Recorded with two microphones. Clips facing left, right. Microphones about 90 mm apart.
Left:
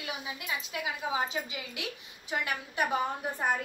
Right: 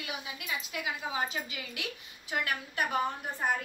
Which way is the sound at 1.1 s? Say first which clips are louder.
Left 2 dB; 15° left (ahead or behind).